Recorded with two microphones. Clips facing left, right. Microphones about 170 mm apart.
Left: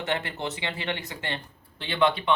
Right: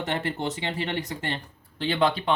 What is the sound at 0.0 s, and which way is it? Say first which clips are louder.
Speech: right 2 dB; 40° right (ahead or behind).